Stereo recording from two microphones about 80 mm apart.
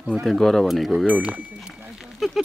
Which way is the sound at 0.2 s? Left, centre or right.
Centre.